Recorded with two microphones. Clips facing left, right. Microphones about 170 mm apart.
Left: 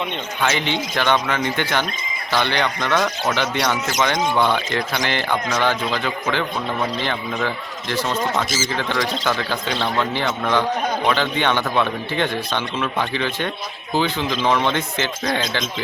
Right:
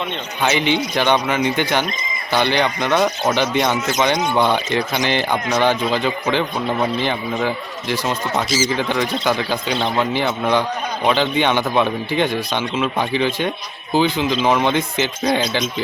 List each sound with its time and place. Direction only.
0.4 s a man's voice: 15° right (ahead or behind)
8.4 s speech: 50° left (ahead or behind)
9.2 s a man's voice: 15° right (ahead or behind)